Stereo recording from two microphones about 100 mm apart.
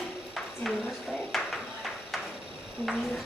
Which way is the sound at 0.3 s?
Centre (ahead or behind).